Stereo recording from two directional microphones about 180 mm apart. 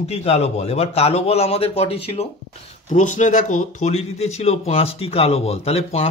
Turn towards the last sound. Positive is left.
turn(degrees=35)  # may be behind; listen again after turning